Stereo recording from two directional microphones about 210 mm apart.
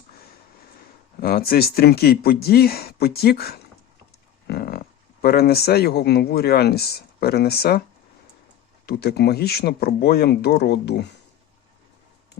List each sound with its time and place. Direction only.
1.2 s speech: 45° left (ahead or behind)
8.9 s speech: 50° left (ahead or behind)